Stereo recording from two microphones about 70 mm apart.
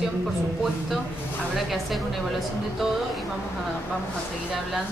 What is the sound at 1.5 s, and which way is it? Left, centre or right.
Speech, centre.